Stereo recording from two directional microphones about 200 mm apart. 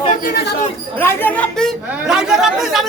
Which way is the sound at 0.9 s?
10° left (ahead or behind).